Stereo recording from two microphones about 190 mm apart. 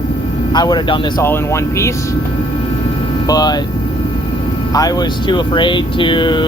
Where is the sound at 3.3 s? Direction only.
20° left (ahead or behind).